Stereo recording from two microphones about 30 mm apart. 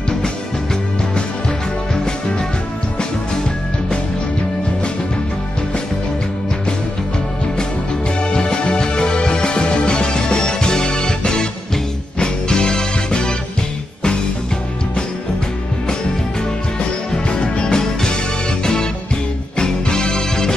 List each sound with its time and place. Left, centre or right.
8.2 s music: left
17.1 s music: left